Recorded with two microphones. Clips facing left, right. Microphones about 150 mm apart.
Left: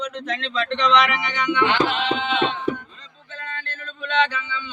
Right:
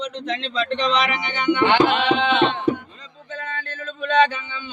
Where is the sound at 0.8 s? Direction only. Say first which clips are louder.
Left 5 dB; 30° right (ahead or behind).